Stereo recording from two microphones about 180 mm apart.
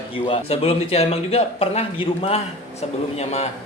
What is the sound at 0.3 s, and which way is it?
Speech, 35° left (ahead or behind).